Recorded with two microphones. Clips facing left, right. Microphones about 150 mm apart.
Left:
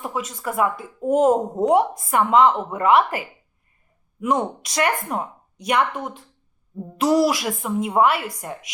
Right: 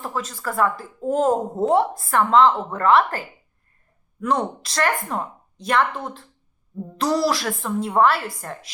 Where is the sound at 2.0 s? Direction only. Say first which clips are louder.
Even; 5° left (ahead or behind).